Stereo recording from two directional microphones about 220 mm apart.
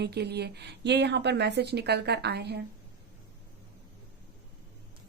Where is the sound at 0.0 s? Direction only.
50° right (ahead or behind).